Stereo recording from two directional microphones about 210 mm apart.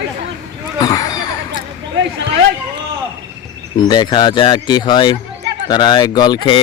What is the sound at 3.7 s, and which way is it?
A man's voice, 20° left (ahead or behind).